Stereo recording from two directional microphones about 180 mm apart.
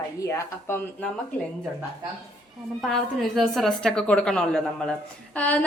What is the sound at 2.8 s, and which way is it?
A woman's voice, centre (ahead or behind).